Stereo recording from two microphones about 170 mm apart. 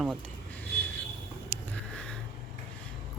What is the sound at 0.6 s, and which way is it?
Vehicle, 10° left (ahead or behind).